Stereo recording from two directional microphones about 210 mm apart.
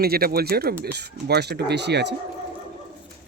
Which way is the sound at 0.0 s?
45° right (ahead or behind).